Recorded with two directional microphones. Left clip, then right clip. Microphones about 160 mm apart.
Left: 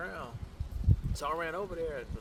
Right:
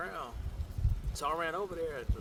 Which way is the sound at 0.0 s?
30° right (ahead or behind).